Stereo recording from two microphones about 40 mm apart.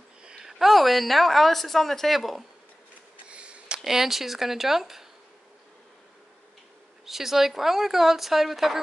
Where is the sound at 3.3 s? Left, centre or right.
Right.